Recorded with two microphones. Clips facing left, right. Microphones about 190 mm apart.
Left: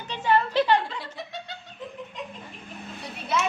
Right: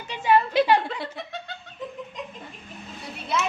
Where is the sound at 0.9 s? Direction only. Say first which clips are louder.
Right 3 dB; 55° right (ahead or behind).